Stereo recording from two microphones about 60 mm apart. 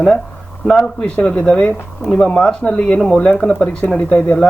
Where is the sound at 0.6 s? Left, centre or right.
Centre.